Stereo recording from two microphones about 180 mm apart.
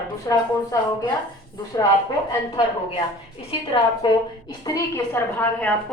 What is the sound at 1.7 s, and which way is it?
Speech, 20° left (ahead or behind).